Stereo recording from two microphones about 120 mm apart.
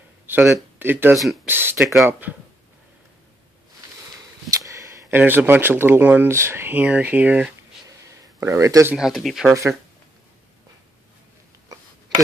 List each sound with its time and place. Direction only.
0.3 s speech: 15° right (ahead or behind)
1.1 s speech: centre (ahead or behind)
1.5 s speech: 20° right (ahead or behind)
4.5 s a sound: 25° right (ahead or behind)
5.1 s speech: 15° right (ahead or behind)
8.4 s speech: 25° right (ahead or behind)
8.9 s speech: centre (ahead or behind)
9.5 s speech: 25° right (ahead or behind)